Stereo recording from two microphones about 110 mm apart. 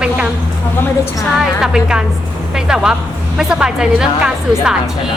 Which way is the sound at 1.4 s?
5° right (ahead or behind).